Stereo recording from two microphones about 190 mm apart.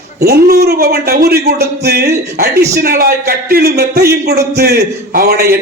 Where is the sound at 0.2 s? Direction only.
55° right (ahead or behind).